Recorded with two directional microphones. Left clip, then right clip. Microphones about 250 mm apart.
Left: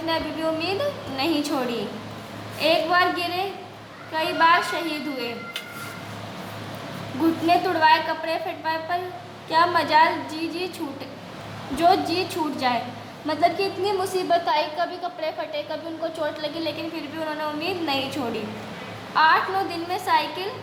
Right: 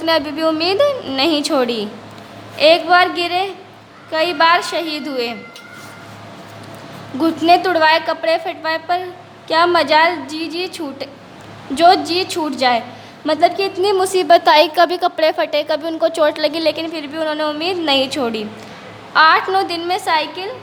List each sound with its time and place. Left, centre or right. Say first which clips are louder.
0.0 s a woman's voice: right 9 dB; right
7.4 s a woman's voice: right 7 dB; right